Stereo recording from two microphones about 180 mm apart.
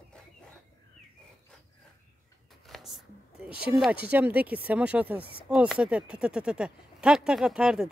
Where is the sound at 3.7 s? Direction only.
5° right (ahead or behind).